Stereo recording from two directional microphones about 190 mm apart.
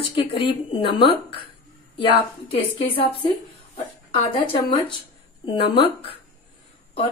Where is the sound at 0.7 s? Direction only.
30° left (ahead or behind).